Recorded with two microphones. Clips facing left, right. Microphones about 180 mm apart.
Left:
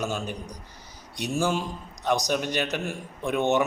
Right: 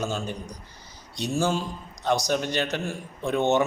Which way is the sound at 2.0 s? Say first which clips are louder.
Right 1 dB; 15° left (ahead or behind).